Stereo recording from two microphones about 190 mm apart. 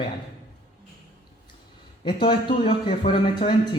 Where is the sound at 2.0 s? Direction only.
25° left (ahead or behind).